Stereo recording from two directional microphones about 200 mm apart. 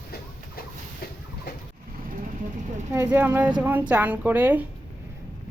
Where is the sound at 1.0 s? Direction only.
50° left (ahead or behind).